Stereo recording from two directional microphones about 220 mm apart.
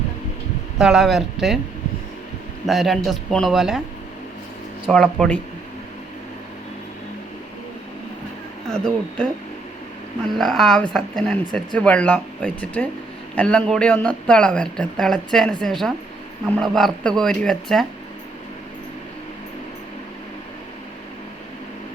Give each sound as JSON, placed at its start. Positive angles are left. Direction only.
{"t": 0.8, "sound": "speech", "side_deg": 0}
{"t": 2.6, "sound": "speech", "side_deg": 0}
{"t": 4.9, "sound": "speech", "side_deg": 0}
{"t": 8.7, "sound": "speech", "side_deg": 5}
{"t": 10.3, "sound": "speech", "side_deg": 0}